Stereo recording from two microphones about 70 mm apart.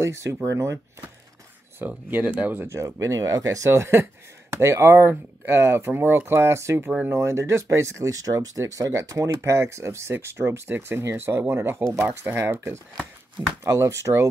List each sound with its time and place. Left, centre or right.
0.0 s speech: right
1.8 s speech: right
2.6 s speech: right
11.8 s speech: right